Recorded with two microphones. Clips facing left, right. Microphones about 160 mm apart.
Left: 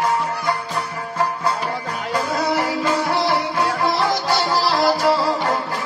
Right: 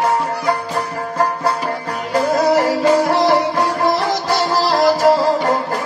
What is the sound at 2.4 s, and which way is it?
Music, 40° right (ahead or behind).